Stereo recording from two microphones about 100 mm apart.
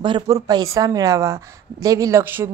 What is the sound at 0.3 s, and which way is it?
A woman's voice, 35° right (ahead or behind).